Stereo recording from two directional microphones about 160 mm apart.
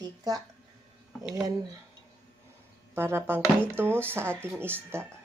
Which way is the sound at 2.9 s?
15° right (ahead or behind).